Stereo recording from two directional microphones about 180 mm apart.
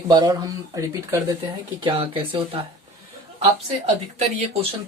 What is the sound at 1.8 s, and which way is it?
Speech, 30° right (ahead or behind).